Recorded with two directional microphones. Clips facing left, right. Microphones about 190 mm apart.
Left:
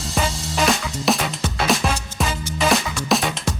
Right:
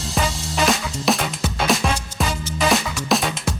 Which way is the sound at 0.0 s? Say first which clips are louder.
Even; centre (ahead or behind).